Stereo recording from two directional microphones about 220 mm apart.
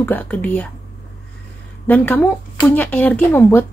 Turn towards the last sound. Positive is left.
turn(degrees=10)  # may be behind; listen again after turning